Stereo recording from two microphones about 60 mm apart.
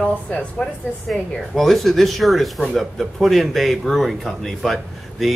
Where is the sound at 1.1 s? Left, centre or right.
Centre.